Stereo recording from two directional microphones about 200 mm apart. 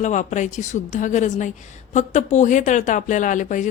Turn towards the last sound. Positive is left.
turn(degrees=40)  # may be behind; listen again after turning